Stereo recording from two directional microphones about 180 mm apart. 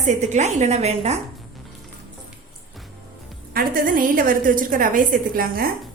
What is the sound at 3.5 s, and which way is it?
A woman's voice, 50° right (ahead or behind).